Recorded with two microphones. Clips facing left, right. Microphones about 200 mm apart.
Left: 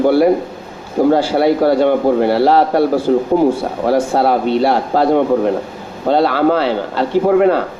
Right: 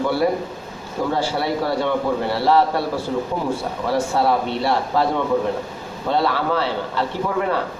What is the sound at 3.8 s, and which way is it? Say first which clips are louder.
Speech: left 6 dB; 50° left (ahead or behind).